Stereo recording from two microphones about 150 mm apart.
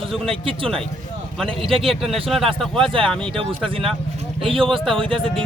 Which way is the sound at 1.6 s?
40° right (ahead or behind).